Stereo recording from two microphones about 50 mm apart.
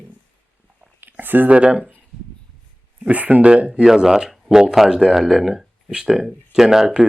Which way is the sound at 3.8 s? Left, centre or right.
Centre.